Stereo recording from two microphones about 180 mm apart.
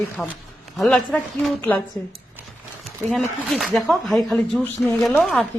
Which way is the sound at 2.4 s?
10° right (ahead or behind).